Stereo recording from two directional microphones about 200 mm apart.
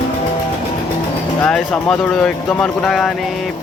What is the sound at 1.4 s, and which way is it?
Speech, 5° left (ahead or behind).